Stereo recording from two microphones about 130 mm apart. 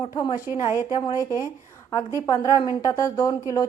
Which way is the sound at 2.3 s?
25° left (ahead or behind).